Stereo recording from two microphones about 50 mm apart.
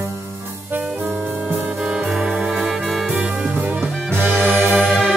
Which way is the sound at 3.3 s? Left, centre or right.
Right.